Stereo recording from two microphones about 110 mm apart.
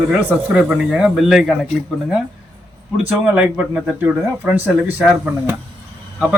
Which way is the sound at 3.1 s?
15° right (ahead or behind).